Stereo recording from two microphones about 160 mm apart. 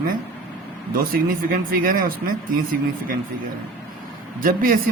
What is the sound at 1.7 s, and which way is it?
Speech, 60° right (ahead or behind).